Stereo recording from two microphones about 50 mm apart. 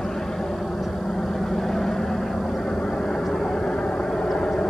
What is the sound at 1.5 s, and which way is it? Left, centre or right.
Vehicle, centre.